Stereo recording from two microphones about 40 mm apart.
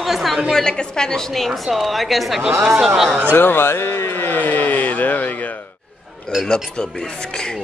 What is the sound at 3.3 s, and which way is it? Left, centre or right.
Speech, left.